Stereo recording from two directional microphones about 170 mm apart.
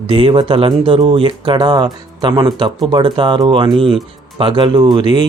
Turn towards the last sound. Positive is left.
turn(degrees=-25)  # may be behind; listen again after turning